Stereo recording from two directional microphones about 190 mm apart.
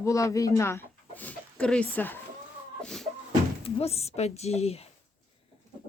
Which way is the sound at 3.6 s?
35° left (ahead or behind).